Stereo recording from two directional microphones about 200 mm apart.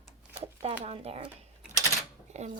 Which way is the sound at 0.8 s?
30° right (ahead or behind).